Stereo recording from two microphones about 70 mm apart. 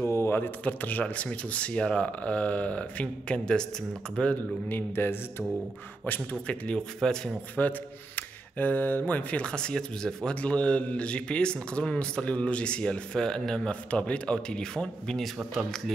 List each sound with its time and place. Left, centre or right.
0.0 s speech: left; by 4.4 s centre
4.6 s speech: left
6.4 s speech: centre
7.6 s speech: left